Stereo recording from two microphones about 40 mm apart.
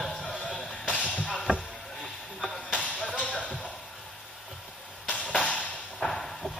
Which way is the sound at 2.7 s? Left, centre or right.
Left.